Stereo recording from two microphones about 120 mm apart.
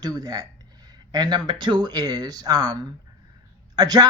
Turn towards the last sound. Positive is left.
turn(degrees=-35)  # may be behind; listen again after turning